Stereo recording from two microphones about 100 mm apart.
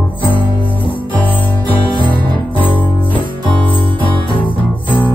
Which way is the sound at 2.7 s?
55° left (ahead or behind).